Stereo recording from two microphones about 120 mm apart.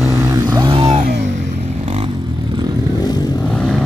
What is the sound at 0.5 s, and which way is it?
Vehicle, 35° right (ahead or behind).